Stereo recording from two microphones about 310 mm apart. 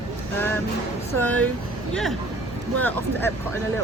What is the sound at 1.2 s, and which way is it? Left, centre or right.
Speech, centre.